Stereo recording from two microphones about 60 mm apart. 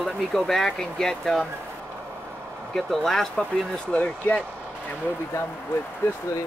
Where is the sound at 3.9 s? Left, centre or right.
Left.